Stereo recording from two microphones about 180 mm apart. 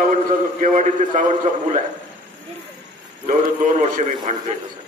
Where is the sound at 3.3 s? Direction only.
45° right (ahead or behind).